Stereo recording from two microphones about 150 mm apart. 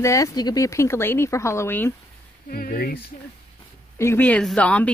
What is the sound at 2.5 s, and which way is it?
Speech, 85° left.